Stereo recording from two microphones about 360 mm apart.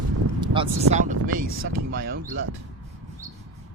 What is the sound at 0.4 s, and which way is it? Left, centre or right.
Speech, centre.